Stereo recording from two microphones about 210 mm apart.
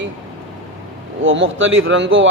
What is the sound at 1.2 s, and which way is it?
Speech, 65° right (ahead or behind).